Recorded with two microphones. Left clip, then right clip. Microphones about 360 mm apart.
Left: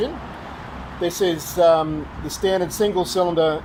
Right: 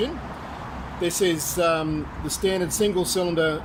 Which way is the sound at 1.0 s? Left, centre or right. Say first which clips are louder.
Left 2 dB; centre.